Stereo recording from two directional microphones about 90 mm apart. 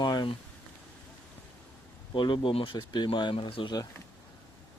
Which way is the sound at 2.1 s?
65° left (ahead or behind).